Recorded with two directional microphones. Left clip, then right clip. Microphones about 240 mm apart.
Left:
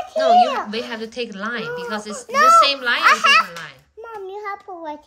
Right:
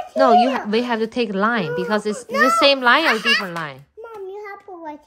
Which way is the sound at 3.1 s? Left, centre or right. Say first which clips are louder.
Left 5 dB; centre.